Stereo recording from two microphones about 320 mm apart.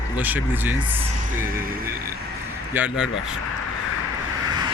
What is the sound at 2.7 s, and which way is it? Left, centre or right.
Speech, centre.